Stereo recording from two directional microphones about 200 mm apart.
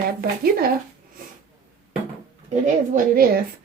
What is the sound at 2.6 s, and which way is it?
Speech, 45° right (ahead or behind).